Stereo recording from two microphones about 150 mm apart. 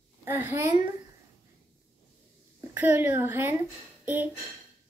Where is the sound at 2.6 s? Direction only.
15° right (ahead or behind).